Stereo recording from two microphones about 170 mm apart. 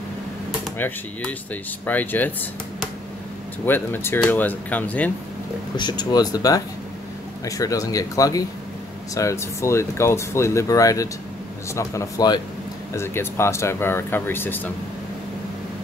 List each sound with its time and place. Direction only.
0.7 s speech: 10° left (ahead or behind)
3.6 s speech: 10° left (ahead or behind)
5.8 s speech: 25° left (ahead or behind)